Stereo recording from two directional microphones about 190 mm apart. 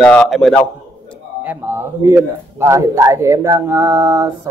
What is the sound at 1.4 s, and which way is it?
Speech, 10° right (ahead or behind).